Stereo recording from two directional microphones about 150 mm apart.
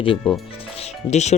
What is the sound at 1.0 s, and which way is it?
Speech, 50° left (ahead or behind).